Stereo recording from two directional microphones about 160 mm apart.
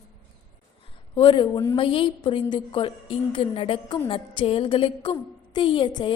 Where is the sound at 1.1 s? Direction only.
30° left (ahead or behind).